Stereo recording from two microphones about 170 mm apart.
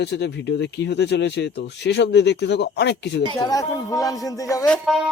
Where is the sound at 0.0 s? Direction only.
90° left.